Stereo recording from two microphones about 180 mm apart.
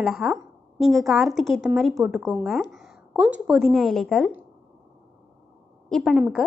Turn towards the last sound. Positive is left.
turn(degrees=0)  # may be behind; listen again after turning